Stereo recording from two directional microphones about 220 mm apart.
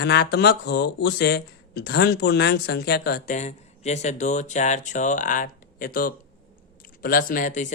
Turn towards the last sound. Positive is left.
turn(degrees=35)  # may be behind; listen again after turning